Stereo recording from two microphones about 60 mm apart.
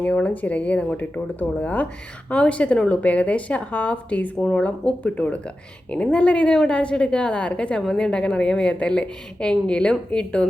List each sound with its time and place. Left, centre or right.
0.0 s a woman's voice: left